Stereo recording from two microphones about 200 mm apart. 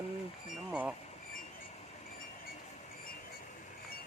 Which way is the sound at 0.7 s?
5° right (ahead or behind).